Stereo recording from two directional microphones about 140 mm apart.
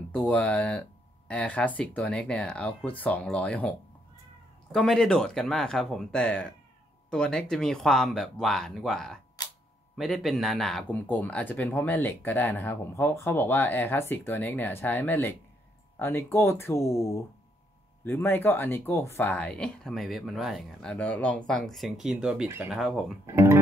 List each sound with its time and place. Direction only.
0.1 s speech: 10° left (ahead or behind)
4.7 s speech: 5° left (ahead or behind)
23.2 s speech: 20° right (ahead or behind)